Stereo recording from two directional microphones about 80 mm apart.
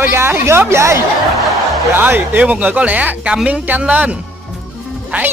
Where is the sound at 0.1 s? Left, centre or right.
Right.